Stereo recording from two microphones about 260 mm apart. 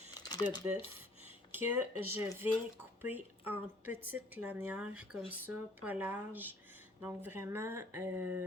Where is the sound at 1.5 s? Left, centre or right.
Centre.